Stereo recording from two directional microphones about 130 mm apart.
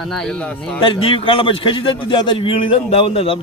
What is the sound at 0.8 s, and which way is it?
A man's voice, 45° left (ahead or behind).